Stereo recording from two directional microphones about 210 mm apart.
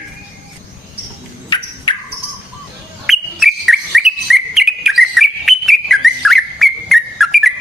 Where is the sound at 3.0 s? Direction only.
Centre (ahead or behind).